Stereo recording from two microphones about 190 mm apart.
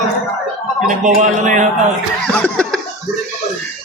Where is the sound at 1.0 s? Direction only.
40° right (ahead or behind).